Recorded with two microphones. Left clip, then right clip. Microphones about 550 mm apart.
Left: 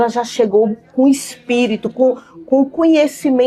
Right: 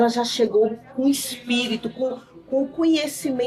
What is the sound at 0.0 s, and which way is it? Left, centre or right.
Speech, left.